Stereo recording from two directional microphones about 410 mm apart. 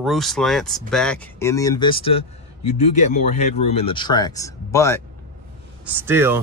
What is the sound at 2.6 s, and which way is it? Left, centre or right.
Speech, left.